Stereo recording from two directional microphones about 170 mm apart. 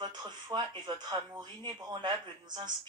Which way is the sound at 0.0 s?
25° right (ahead or behind).